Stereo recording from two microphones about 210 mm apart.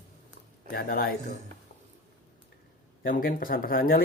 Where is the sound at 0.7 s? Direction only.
45° left (ahead or behind).